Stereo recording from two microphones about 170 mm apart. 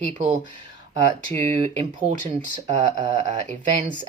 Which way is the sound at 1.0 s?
45° right (ahead or behind).